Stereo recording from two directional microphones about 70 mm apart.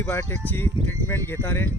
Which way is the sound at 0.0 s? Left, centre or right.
Left.